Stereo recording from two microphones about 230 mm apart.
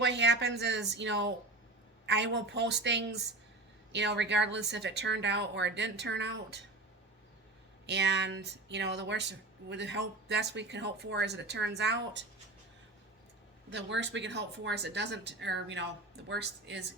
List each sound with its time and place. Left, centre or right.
0.0 s speech: right
7.9 s speech: right
13.7 s speech: right